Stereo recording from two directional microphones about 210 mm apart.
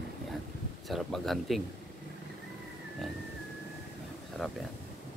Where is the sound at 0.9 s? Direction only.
Centre (ahead or behind).